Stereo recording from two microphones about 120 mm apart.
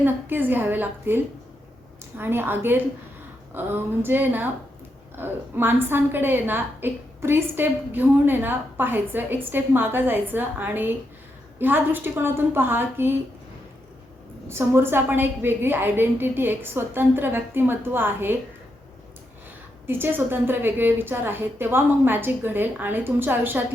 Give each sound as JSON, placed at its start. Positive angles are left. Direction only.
{"t": 0.0, "sound": "a woman's voice", "side_deg": -15}
{"t": 14.4, "sound": "a woman's voice", "side_deg": -20}
{"t": 19.9, "sound": "a woman's voice", "side_deg": -15}